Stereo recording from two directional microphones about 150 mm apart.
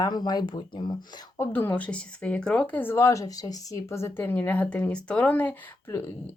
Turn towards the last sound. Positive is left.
turn(degrees=15)  # may be behind; listen again after turning